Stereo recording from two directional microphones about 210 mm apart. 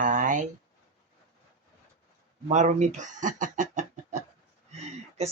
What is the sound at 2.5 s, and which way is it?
Speech, 35° right (ahead or behind).